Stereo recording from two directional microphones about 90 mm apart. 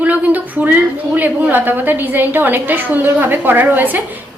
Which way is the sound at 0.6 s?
20° right (ahead or behind).